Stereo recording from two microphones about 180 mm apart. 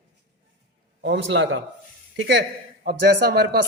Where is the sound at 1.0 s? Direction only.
80° right.